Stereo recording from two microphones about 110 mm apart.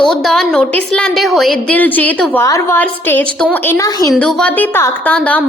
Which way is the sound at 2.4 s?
30° left (ahead or behind).